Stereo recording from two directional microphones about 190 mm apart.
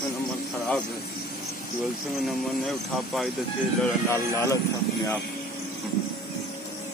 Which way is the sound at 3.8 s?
15° left (ahead or behind).